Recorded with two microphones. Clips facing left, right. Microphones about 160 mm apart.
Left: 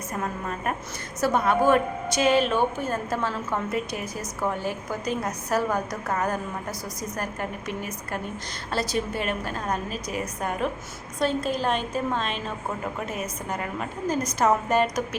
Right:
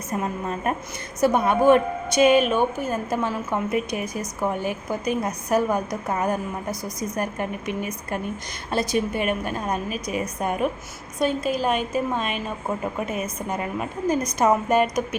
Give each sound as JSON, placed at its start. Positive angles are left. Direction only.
{"t": 0.1, "sound": "a woman's voice", "side_deg": -20}